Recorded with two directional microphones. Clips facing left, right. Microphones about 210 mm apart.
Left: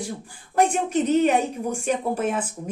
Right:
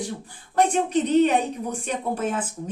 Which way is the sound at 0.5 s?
10° left (ahead or behind).